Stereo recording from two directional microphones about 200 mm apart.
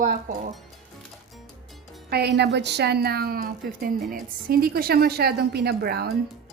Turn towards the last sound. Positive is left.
turn(degrees=-50)  # may be behind; listen again after turning